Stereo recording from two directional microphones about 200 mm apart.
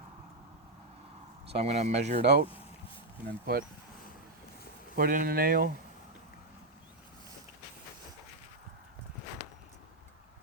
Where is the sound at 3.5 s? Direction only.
50° right (ahead or behind).